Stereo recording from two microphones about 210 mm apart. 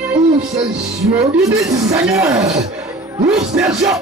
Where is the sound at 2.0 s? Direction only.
Centre (ahead or behind).